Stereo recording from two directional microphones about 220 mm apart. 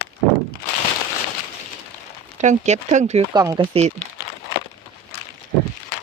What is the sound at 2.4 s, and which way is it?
Speech, 30° right (ahead or behind).